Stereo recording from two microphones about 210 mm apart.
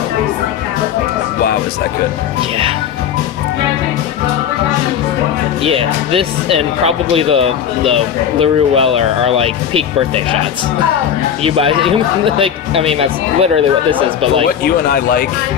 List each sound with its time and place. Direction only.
5.6 s speech: 25° right (ahead or behind)
11.4 s speech: 25° right (ahead or behind)
14.4 s speech: 45° left (ahead or behind)